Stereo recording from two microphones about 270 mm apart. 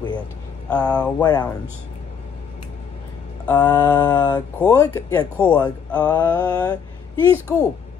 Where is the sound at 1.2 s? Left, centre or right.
Centre.